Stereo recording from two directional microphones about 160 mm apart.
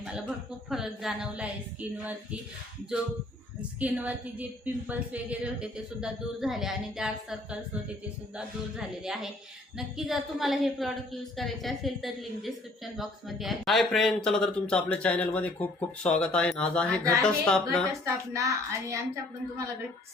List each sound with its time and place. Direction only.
0.7 s a woman's voice: centre (ahead or behind)
3.8 s a woman's voice: 10° right (ahead or behind); by 17.6 s 5° left (ahead or behind)
18.0 s a woman's voice: 20° right (ahead or behind)